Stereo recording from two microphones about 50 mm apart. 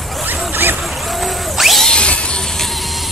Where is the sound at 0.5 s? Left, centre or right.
Right.